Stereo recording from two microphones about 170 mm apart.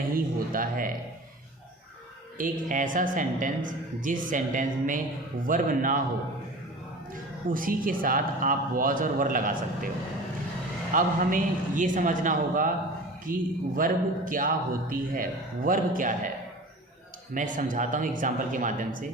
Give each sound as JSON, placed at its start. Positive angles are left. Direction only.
{"t": 0.1, "sound": "speech", "side_deg": -55}
{"t": 2.4, "sound": "speech", "side_deg": -50}
{"t": 7.1, "sound": "speech", "side_deg": -55}
{"t": 10.9, "sound": "speech", "side_deg": -50}
{"t": 17.3, "sound": "speech", "side_deg": -50}